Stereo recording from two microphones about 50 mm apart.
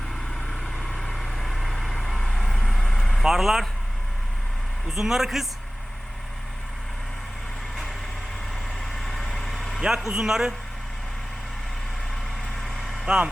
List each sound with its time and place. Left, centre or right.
0.9 s vehicle: centre
3.2 s speech: centre
4.9 s speech: centre
8.8 s vehicle: centre
9.8 s speech: centre
12.5 s vehicle: centre
13.1 s speech: centre